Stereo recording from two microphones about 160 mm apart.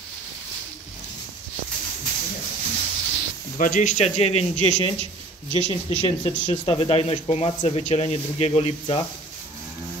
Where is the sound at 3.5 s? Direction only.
55° left (ahead or behind); by 9.0 s 35° left (ahead or behind).